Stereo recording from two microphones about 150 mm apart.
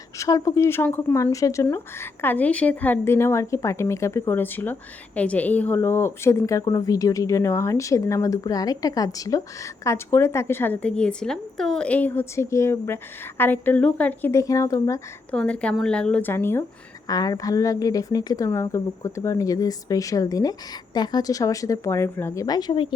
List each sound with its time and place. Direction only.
0.2 s a woman's voice: 20° left (ahead or behind)
15.3 s a woman's voice: 5° left (ahead or behind); by 23.0 s 35° left (ahead or behind)